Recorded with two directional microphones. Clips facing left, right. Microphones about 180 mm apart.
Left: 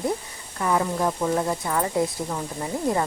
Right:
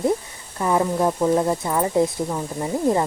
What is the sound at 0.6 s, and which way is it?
Speech, 25° right (ahead or behind).